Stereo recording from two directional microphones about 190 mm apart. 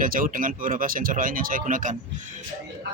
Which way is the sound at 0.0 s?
45° right (ahead or behind).